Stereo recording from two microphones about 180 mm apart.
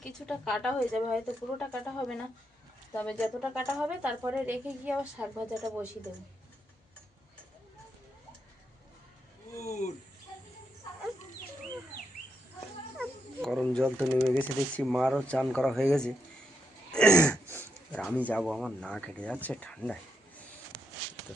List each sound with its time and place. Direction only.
0.0 s speech: 5° left (ahead or behind)
9.6 s speech: 40° left (ahead or behind)
13.0 s cat: centre (ahead or behind)
14.3 s speech: centre (ahead or behind)
16.9 s a sound: 5° left (ahead or behind)
17.2 s speech: 10° left (ahead or behind)